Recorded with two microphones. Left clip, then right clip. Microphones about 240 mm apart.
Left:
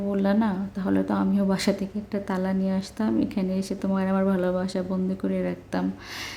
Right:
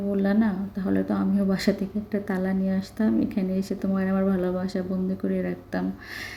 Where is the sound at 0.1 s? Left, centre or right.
Centre.